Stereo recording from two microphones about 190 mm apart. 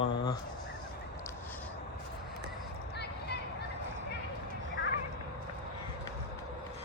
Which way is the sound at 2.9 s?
60° left (ahead or behind).